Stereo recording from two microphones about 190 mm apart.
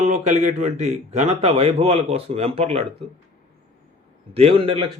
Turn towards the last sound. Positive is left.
turn(degrees=-30)  # may be behind; listen again after turning